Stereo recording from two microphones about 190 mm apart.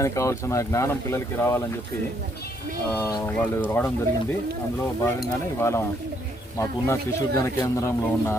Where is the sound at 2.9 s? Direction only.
10° left (ahead or behind).